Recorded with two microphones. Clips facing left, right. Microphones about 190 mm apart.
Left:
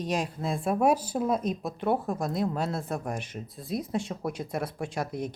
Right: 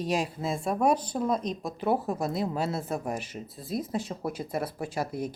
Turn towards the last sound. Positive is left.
turn(degrees=-5)  # may be behind; listen again after turning